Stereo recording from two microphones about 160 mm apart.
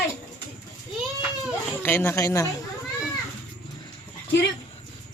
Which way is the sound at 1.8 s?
10° left (ahead or behind).